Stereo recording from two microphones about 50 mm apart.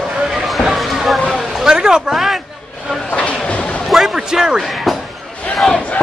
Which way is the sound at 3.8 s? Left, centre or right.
Centre.